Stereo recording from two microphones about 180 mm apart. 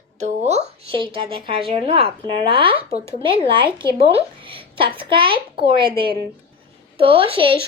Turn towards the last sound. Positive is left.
turn(degrees=-30)  # may be behind; listen again after turning